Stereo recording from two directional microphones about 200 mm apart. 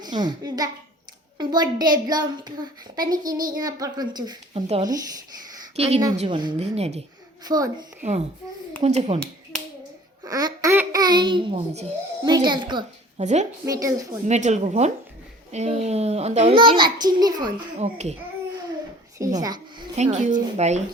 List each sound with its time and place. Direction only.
0.0 s a woman's voice: 20° right (ahead or behind)
7.4 s a woman's voice: 20° right (ahead or behind)
8.8 s speech: 35° right (ahead or behind)
10.2 s a child's voice: 20° right (ahead or behind)
13.1 s speech: 35° right (ahead or behind)
13.7 s a woman's voice: 15° right (ahead or behind)
14.3 s a woman's voice: 35° right (ahead or behind); by 17.5 s 20° right (ahead or behind)
17.7 s speech: 35° right (ahead or behind)
19.2 s a woman's voice: 20° right (ahead or behind)
20.0 s speech: 35° right (ahead or behind)